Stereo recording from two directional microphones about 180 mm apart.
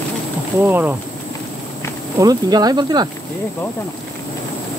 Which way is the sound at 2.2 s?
20° right (ahead or behind).